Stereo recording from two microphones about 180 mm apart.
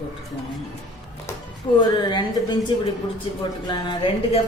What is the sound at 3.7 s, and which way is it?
Speech, 25° left (ahead or behind).